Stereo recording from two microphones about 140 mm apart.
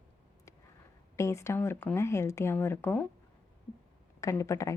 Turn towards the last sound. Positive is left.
turn(degrees=20)  # may be behind; listen again after turning